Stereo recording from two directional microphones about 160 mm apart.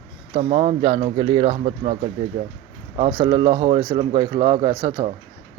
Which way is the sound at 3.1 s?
25° right (ahead or behind).